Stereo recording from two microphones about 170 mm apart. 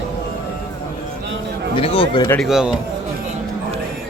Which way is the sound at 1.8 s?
35° left (ahead or behind).